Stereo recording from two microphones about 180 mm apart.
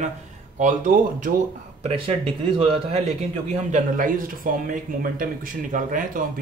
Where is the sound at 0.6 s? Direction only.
45° right (ahead or behind).